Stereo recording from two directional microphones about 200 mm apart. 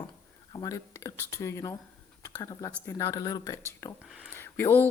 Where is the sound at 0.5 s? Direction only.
15° left (ahead or behind).